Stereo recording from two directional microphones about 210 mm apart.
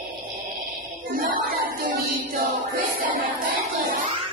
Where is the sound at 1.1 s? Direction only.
45° right (ahead or behind).